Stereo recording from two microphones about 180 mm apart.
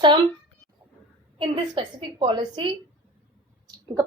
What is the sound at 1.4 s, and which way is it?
Speech, 25° right (ahead or behind).